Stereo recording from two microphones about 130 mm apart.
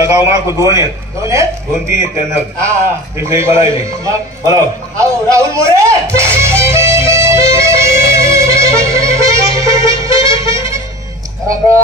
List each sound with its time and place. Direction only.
0.0 s a man's voice: 25° right (ahead or behind)
5.9 s music: 20° right (ahead or behind)